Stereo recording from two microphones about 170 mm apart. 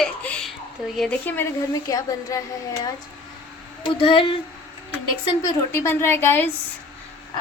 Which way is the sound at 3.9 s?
30° left (ahead or behind).